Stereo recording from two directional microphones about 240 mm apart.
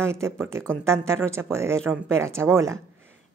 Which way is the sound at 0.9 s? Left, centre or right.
Centre.